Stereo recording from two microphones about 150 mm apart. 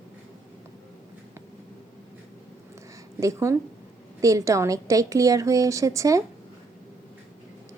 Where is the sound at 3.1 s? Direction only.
20° right (ahead or behind).